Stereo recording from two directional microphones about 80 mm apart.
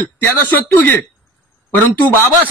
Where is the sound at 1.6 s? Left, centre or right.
Left.